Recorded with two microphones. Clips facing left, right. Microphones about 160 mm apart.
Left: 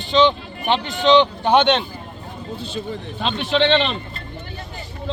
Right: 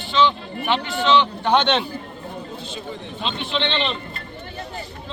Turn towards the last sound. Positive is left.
turn(degrees=45)  # may be behind; listen again after turning